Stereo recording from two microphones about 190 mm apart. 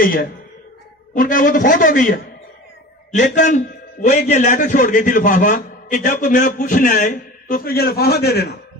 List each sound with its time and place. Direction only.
0.0 s a man's voice: 50° left (ahead or behind)